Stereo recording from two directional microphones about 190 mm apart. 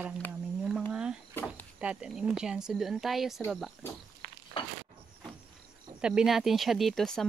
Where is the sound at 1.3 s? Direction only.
10° left (ahead or behind).